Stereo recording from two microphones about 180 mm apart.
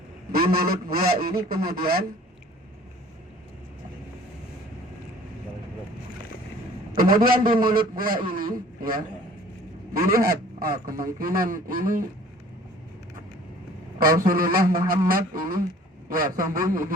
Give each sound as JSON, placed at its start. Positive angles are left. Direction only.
{"t": 0.3, "sound": "a man's voice", "side_deg": -55}
{"t": 6.9, "sound": "a man's voice", "side_deg": -55}
{"t": 14.0, "sound": "speech", "side_deg": -50}